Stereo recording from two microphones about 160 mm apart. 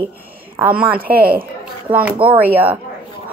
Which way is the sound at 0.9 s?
65° right (ahead or behind).